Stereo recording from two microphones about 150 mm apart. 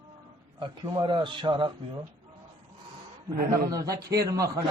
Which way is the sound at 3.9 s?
90° right.